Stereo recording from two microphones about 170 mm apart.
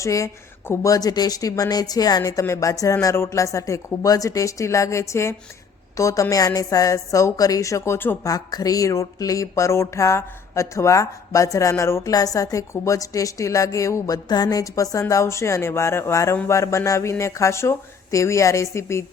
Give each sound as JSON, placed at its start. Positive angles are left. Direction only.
{"t": 0.0, "sound": "a woman's voice", "side_deg": 20}